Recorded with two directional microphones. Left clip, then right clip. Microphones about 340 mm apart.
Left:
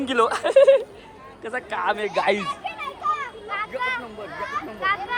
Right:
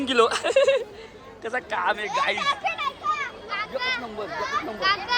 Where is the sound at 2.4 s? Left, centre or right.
Centre.